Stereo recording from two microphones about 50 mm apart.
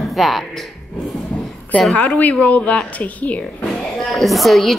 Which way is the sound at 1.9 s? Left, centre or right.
Left.